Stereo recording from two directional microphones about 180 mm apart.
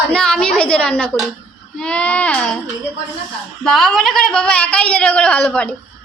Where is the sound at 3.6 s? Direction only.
Centre (ahead or behind).